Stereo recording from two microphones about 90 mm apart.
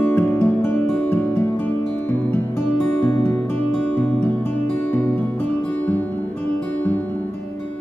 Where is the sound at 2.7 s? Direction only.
10° left (ahead or behind).